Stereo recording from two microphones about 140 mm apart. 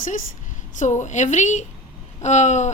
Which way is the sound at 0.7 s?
60° left (ahead or behind).